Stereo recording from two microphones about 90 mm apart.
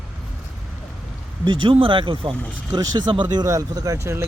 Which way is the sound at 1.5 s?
75° right (ahead or behind).